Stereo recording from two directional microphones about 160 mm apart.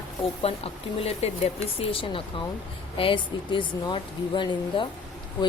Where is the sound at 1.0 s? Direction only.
40° left (ahead or behind).